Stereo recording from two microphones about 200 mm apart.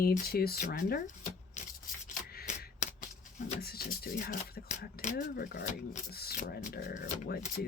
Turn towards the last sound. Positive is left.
turn(degrees=45)  # may be behind; listen again after turning